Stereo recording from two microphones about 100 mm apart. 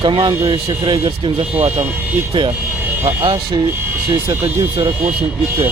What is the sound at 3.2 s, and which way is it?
Speech, 50° right (ahead or behind).